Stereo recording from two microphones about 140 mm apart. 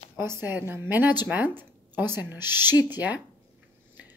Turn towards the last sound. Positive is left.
turn(degrees=-10)  # may be behind; listen again after turning